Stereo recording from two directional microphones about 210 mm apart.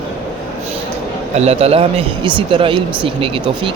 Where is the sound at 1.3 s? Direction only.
30° right (ahead or behind).